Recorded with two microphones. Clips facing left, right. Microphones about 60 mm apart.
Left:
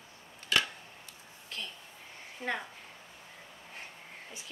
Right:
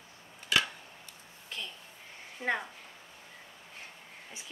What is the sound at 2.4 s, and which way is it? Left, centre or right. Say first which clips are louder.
Speech: right 3 dB; centre.